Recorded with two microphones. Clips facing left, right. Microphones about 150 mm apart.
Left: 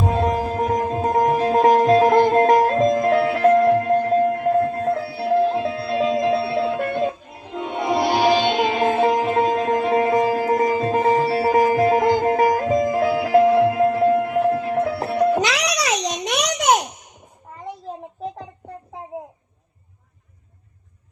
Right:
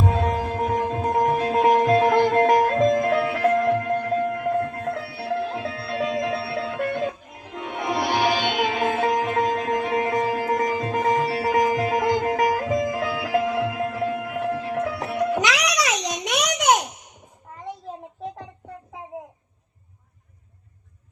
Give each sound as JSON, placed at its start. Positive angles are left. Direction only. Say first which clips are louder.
{"t": 0.0, "sound": "music", "louder": "left 3 dB", "side_deg": 20}
{"t": 0.7, "sound": "sitar", "louder": "left 3 dB", "side_deg": 20}
{"t": 1.4, "sound": "music", "louder": "left 4 dB", "side_deg": 25}
{"t": 15.4, "sound": "a sound", "louder": "left 1 dB", "side_deg": 25}